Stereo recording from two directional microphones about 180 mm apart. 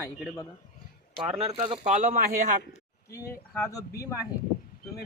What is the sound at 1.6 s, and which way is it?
Speech, 40° right (ahead or behind).